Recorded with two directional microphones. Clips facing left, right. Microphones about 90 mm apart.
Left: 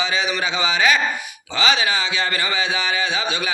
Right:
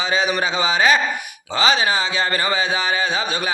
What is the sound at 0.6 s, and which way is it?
Speech, 35° right (ahead or behind).